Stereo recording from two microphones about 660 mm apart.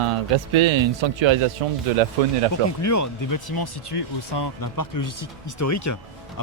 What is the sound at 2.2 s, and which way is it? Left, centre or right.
Speech, right.